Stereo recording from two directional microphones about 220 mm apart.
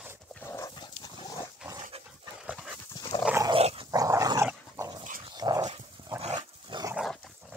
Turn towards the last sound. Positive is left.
turn(degrees=0)  # may be behind; listen again after turning